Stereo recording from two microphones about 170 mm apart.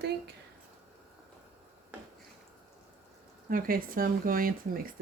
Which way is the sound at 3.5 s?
55° right (ahead or behind).